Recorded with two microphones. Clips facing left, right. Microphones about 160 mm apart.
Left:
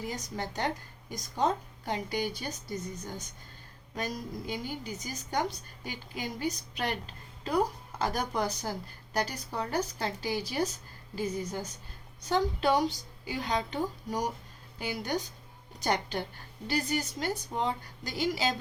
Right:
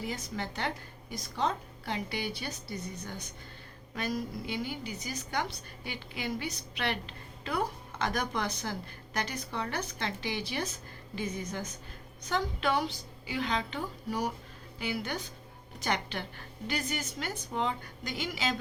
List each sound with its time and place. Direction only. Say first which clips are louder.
0.0 s a woman's voice: even; 40° left (ahead or behind)
7.4 s a sound: left 4 dB; 40° left (ahead or behind)
8.1 s a woman's voice: left 2 dB; 35° left (ahead or behind)